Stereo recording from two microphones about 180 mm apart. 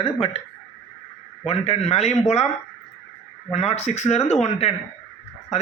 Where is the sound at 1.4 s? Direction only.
35° left (ahead or behind).